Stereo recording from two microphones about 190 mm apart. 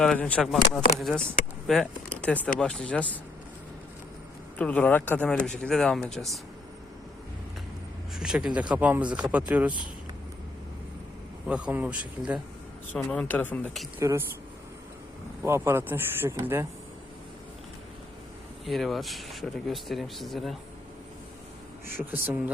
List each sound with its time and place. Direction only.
0.0 s speech: 5° left (ahead or behind)
4.5 s speech: 5° left (ahead or behind)
8.1 s speech: 5° right (ahead or behind)
11.4 s speech: 5° right (ahead or behind)
12.9 s speech: 5° left (ahead or behind)
14.0 s speech: 15° right (ahead or behind)
15.4 s speech: 15° right (ahead or behind)
18.6 s speech: centre (ahead or behind)
21.9 s speech: 10° right (ahead or behind)